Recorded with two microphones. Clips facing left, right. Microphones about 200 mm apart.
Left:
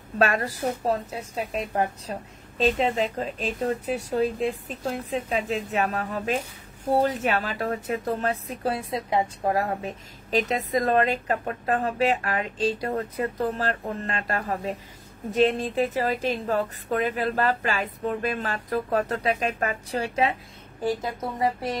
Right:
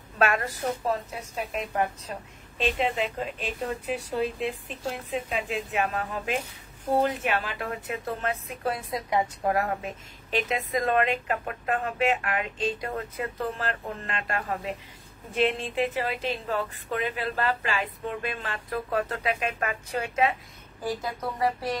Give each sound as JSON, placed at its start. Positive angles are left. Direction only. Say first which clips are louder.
{"t": 0.2, "sound": "a woman's voice", "louder": "left 2 dB", "side_deg": 35}